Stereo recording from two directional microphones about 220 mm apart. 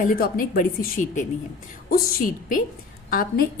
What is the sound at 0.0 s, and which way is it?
A woman's voice, 40° left (ahead or behind).